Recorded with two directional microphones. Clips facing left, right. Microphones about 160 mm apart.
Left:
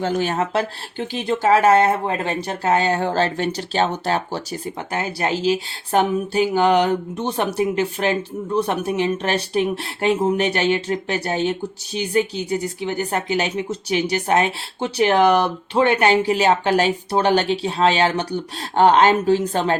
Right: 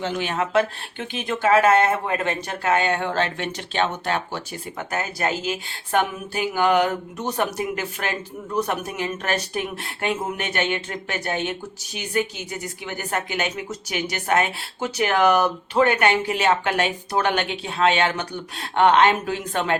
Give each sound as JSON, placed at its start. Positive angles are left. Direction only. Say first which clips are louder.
{"t": 0.0, "sound": "a woman's voice", "louder": "left 4 dB", "side_deg": 40}